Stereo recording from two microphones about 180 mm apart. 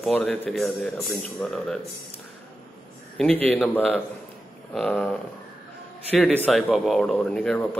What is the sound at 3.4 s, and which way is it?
A man's voice, 10° left (ahead or behind).